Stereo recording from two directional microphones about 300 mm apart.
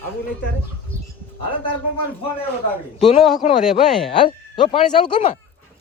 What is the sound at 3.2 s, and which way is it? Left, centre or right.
Speech, centre.